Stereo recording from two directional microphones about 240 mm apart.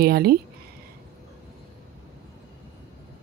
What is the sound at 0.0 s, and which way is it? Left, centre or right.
Speech, right.